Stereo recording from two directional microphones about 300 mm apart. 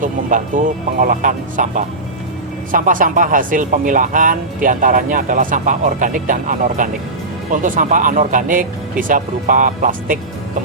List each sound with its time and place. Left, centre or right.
0.0 s speech: right